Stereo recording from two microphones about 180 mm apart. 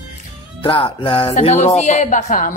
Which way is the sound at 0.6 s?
30° left (ahead or behind).